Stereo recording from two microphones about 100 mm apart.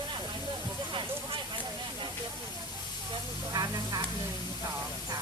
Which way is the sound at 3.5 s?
40° right (ahead or behind).